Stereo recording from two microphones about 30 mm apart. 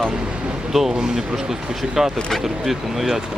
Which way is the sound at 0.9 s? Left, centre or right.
Right.